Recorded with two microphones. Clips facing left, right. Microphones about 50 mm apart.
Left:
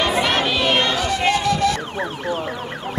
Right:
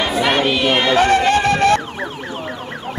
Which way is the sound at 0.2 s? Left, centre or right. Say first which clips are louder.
Right 3 dB; centre.